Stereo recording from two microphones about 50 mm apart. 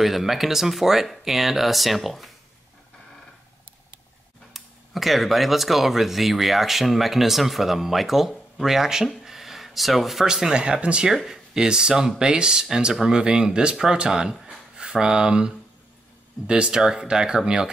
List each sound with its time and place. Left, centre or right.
0.0 s speech: centre
4.6 s speech: centre
9.2 s a sound: centre
10.2 s speech: centre